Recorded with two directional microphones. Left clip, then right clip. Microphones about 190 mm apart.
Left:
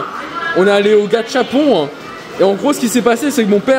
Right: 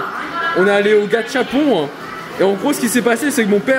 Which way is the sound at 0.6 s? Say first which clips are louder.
Left 3 dB; 20° left (ahead or behind).